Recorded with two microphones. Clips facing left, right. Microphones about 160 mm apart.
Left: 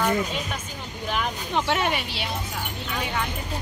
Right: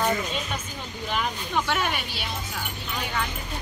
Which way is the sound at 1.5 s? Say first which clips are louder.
Left 3 dB; 25° left (ahead or behind).